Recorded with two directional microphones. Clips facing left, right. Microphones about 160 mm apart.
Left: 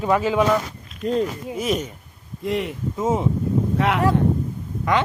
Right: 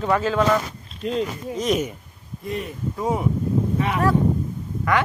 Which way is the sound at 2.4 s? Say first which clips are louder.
Left 5 dB; 90° left.